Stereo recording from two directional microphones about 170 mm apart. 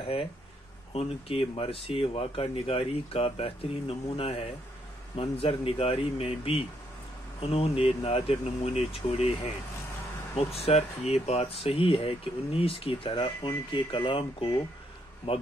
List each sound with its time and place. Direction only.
0.9 s speech: 35° left (ahead or behind)